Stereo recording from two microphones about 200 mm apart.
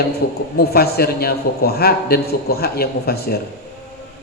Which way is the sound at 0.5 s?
50° left (ahead or behind).